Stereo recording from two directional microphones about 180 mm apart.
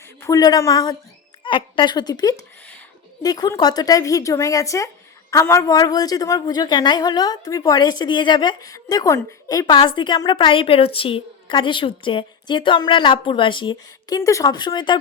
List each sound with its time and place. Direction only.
0.2 s a woman's voice: 20° left (ahead or behind)